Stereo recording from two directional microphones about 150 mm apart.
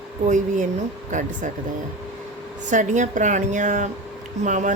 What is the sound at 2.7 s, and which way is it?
Speech, 55° right (ahead or behind).